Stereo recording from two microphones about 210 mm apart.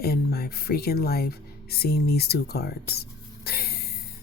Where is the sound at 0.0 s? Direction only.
45° left (ahead or behind).